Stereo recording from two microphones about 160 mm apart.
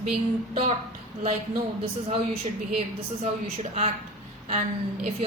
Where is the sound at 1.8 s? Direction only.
40° right (ahead or behind).